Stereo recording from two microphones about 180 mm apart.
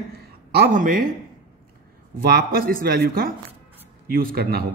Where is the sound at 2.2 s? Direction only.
55° right (ahead or behind).